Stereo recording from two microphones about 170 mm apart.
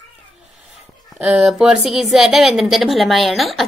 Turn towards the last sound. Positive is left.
turn(degrees=0)  # may be behind; listen again after turning